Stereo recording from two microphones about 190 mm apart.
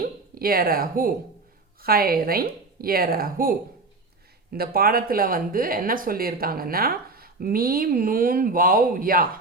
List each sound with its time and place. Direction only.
0.0 s speech: 50° right (ahead or behind)